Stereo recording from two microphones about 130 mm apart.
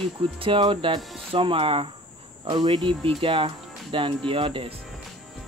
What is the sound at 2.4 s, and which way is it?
Cricket, 35° right (ahead or behind).